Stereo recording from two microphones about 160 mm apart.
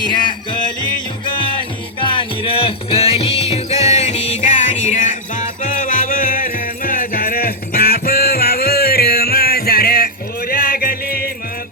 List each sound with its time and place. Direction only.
1.2 s music: 30° left (ahead or behind); by 11.3 s 70° left (ahead or behind)